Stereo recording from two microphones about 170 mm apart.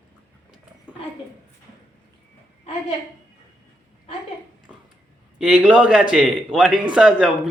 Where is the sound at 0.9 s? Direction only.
10° right (ahead or behind).